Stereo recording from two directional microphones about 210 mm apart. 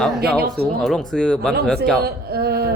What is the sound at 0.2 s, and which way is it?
Speech, 45° right (ahead or behind).